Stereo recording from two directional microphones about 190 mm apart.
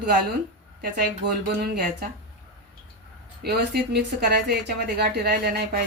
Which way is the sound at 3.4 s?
60° right (ahead or behind).